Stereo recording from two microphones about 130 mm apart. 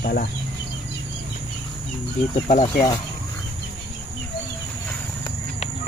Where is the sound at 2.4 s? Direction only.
65° left (ahead or behind).